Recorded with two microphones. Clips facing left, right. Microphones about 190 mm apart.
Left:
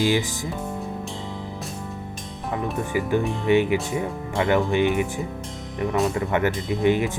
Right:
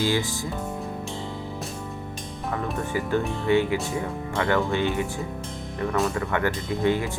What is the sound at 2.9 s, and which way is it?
Speech, 15° left (ahead or behind).